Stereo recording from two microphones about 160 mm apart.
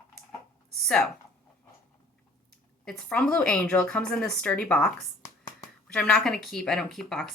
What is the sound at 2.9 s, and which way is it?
Speech, 5° left (ahead or behind).